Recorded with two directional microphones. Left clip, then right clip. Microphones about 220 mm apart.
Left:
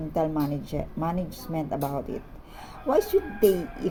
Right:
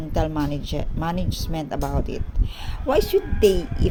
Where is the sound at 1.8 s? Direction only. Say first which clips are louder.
Right 4 dB; 40° right (ahead or behind).